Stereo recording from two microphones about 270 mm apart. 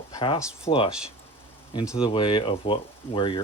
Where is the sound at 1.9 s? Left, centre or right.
Centre.